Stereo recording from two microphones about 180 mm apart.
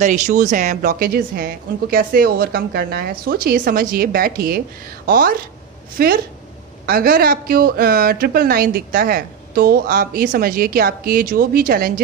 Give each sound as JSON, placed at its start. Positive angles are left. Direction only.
{"t": 0.0, "sound": "speech", "side_deg": -45}